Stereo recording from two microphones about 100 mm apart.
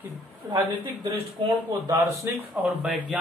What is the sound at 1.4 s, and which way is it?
Speech, 55° right (ahead or behind).